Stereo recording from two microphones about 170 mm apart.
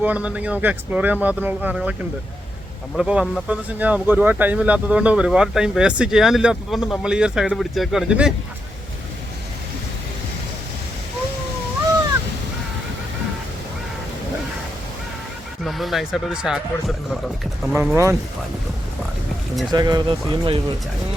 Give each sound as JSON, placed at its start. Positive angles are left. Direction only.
{"t": 0.0, "sound": "speech", "side_deg": -10}
{"t": 15.6, "sound": "speech", "side_deg": 0}
{"t": 17.9, "sound": "speech", "side_deg": -15}
{"t": 19.7, "sound": "speech", "side_deg": -25}